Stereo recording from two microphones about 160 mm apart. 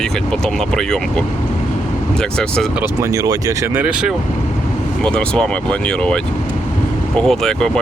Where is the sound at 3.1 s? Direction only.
20° right (ahead or behind).